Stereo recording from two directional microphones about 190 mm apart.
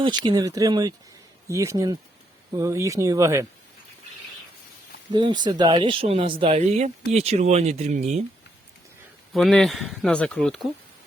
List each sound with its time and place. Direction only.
0.0 s speech: 25° right (ahead or behind)
5.1 s speech: 25° right (ahead or behind)
9.3 s speech: centre (ahead or behind)